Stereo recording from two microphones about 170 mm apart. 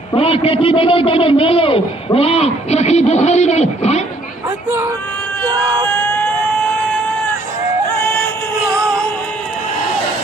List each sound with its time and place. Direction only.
0.1 s a man's voice: 35° left (ahead or behind)
5.5 s speech: 20° right (ahead or behind)